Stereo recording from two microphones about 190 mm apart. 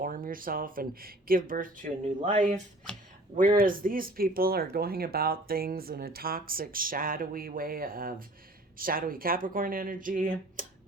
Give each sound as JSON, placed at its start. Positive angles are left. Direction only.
{"t": 0.0, "sound": "speech", "side_deg": -50}